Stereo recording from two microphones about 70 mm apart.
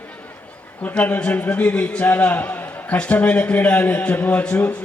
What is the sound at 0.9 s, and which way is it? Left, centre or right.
A man's voice, centre.